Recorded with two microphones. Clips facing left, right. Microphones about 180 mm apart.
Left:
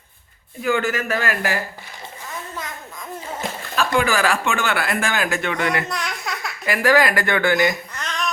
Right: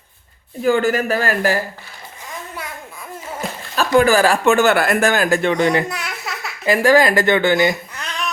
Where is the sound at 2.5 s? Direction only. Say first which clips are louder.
Right 1 dB; 10° right (ahead or behind).